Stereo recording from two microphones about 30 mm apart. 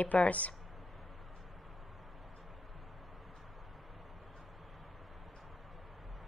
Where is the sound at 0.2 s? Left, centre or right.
Left.